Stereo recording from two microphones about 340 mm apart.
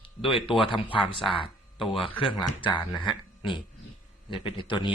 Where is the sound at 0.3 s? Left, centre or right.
Centre.